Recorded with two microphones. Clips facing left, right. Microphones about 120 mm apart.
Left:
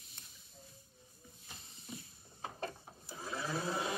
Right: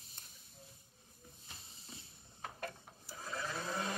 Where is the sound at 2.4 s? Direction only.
20° left (ahead or behind).